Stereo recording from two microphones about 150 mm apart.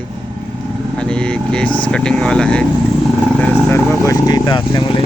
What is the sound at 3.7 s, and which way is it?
A man's voice, 15° left (ahead or behind).